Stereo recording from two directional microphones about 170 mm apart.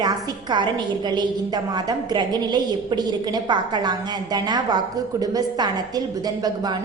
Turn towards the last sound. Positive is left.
turn(degrees=-20)  # may be behind; listen again after turning